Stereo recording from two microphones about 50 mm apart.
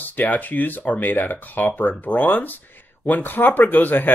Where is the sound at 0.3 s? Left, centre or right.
Left.